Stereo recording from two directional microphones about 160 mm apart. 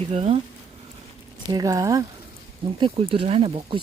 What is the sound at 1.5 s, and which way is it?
Speech, 25° right (ahead or behind).